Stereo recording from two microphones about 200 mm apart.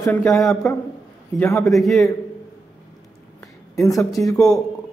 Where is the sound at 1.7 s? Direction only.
Centre (ahead or behind).